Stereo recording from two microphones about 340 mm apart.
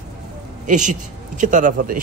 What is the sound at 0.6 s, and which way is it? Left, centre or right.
Speech, right.